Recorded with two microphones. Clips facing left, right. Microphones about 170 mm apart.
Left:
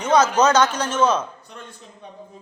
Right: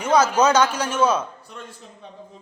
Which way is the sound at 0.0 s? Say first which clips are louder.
Left 1 dB; 10° right (ahead or behind).